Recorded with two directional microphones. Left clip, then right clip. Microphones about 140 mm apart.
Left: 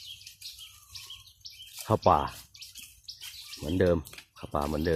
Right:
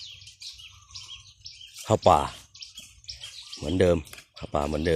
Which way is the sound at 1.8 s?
5° right (ahead or behind).